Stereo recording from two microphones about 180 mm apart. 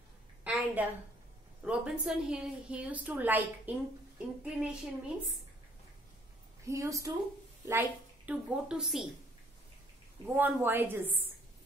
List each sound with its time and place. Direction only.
0.4 s a sound: 10° right (ahead or behind)
1.6 s a woman's voice: 5° right (ahead or behind)
6.6 s a woman's voice: 15° right (ahead or behind)
10.2 s a woman's voice: 10° right (ahead or behind)